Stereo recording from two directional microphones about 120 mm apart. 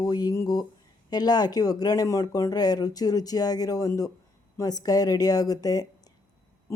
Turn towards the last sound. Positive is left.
turn(degrees=30)  # may be behind; listen again after turning